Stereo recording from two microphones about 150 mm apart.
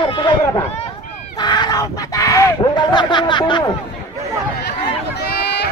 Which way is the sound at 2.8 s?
30° left (ahead or behind).